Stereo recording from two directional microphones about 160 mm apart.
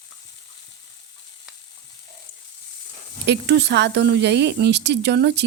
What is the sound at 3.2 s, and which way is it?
Speech, 90° right.